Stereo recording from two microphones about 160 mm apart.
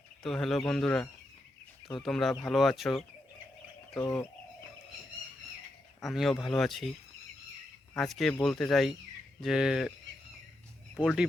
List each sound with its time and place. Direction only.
0.2 s speech: 5° left (ahead or behind)
2.0 s speech: 5° left (ahead or behind)
4.0 s speech: 20° left (ahead or behind)
6.0 s speech: centre (ahead or behind)
7.9 s speech: centre (ahead or behind)
11.0 s speech: 5° right (ahead or behind)